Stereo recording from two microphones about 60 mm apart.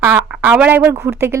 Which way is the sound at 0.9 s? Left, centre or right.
Right.